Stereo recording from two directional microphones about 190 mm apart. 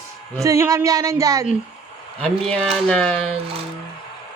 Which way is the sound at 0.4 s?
15° right (ahead or behind).